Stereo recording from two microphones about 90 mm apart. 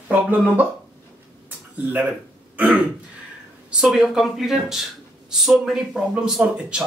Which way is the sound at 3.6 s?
10° right (ahead or behind).